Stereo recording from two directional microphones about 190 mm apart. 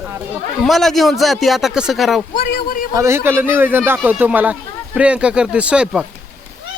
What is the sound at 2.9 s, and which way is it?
Speech, 15° right (ahead or behind).